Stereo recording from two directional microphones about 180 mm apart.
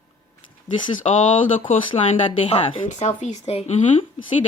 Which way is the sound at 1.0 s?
35° left (ahead or behind).